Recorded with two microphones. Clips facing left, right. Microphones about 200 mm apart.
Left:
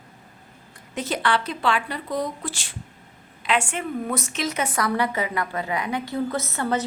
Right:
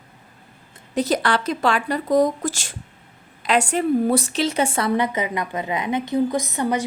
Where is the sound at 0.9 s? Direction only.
40° right (ahead or behind).